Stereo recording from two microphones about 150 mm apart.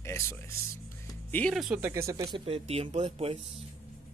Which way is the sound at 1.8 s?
20° right (ahead or behind).